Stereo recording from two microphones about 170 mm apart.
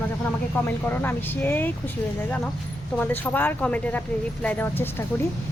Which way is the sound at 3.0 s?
10° left (ahead or behind).